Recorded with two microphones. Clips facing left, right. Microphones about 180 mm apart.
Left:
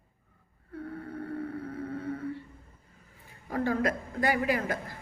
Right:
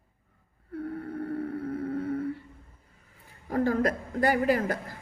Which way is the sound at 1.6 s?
50° right (ahead or behind).